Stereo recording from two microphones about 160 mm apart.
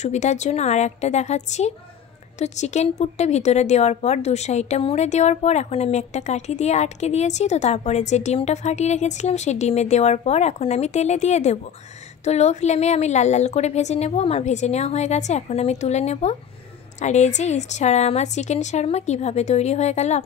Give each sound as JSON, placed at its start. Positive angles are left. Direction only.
{"t": 0.0, "sound": "a woman's voice", "side_deg": 45}